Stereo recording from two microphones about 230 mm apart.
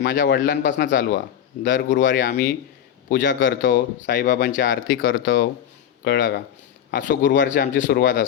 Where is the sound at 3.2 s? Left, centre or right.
Left.